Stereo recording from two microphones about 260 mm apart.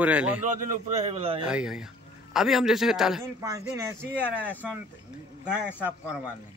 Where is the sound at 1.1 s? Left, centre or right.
Right.